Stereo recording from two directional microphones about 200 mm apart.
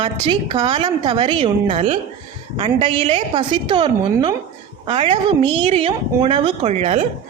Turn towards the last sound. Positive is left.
turn(degrees=-35)  # may be behind; listen again after turning